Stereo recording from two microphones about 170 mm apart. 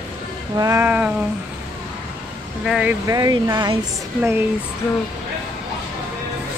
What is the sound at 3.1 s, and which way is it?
Speech, 20° right (ahead or behind).